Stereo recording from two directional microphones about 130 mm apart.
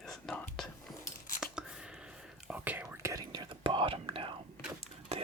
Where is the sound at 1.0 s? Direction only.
90° left.